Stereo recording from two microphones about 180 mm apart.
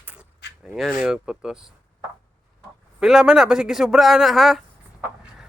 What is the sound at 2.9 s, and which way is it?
Speech, 5° right (ahead or behind).